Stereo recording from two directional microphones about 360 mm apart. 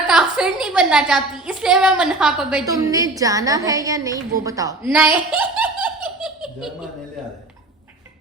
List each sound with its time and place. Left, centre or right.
0.1 s a woman's voice: centre
5.3 s laughter: centre